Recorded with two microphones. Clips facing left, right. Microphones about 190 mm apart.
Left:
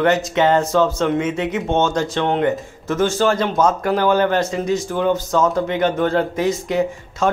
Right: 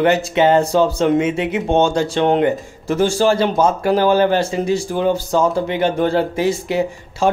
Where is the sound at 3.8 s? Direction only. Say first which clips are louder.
Right 2 dB; 30° right (ahead or behind).